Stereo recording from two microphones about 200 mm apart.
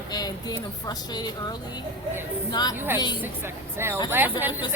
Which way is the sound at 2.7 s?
10° right (ahead or behind).